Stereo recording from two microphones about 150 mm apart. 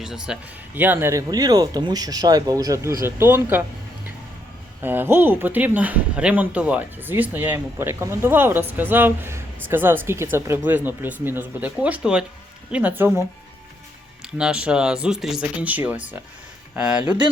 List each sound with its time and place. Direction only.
0.0 s a man's voice: 5° right (ahead or behind)
4.8 s speech: 15° right (ahead or behind)
14.3 s speech: 5° right (ahead or behind)